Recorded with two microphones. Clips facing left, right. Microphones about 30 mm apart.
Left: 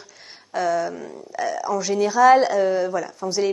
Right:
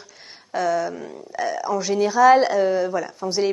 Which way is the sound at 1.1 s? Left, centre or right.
Centre.